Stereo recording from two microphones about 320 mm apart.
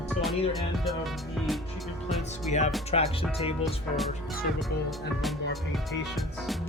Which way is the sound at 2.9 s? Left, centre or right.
Centre.